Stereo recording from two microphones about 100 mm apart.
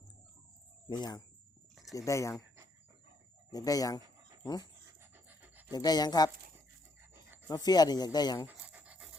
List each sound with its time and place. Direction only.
0.9 s speech: 45° left (ahead or behind)
1.7 s a sound: centre (ahead or behind)
2.0 s speech: 30° left (ahead or behind)
3.5 s speech: 40° left (ahead or behind)
5.1 s music: 15° right (ahead or behind)
5.7 s speech: 40° left (ahead or behind)
7.4 s speech: 40° left (ahead or behind)
8.4 s pant: 15° right (ahead or behind)